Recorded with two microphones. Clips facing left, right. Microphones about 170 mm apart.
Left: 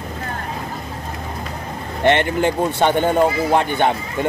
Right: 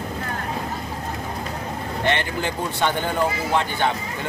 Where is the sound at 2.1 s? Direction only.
20° left (ahead or behind).